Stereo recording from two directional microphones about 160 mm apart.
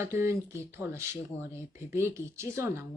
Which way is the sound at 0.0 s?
15° right (ahead or behind).